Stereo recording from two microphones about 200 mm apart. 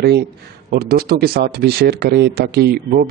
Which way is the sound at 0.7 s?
50° right (ahead or behind).